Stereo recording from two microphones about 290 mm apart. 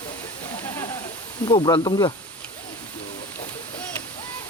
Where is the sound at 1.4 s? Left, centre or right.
Centre.